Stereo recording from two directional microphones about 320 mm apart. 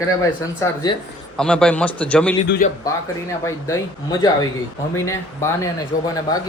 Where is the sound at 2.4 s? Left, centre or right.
Left.